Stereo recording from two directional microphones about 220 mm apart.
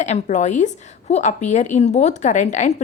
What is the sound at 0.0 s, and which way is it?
Speech, 35° left (ahead or behind).